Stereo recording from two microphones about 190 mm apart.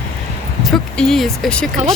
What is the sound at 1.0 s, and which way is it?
Speech, centre (ahead or behind).